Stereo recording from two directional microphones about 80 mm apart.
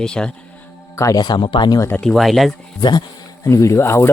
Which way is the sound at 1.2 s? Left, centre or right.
Left.